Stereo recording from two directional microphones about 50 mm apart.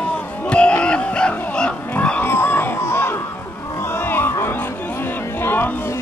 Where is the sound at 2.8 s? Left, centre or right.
Left.